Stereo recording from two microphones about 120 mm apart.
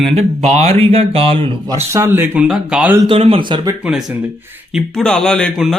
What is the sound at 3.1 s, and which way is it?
Speech, 50° right (ahead or behind).